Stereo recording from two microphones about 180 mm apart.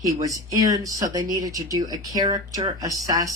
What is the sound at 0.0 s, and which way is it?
Speech, 20° right (ahead or behind).